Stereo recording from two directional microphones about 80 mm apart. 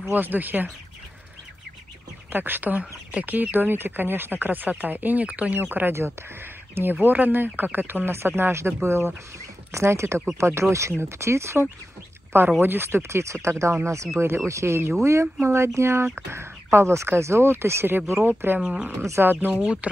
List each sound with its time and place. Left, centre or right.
0.1 s speech: right
2.3 s speech: right
18.6 s speech: centre
18.9 s speech: right
19.6 s speech: centre